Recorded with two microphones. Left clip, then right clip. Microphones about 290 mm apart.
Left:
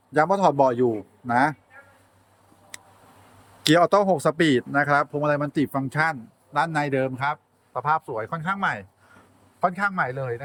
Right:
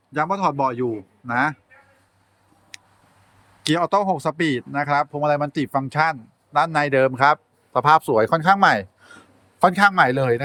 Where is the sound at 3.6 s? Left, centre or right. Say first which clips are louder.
Left 1 dB; centre.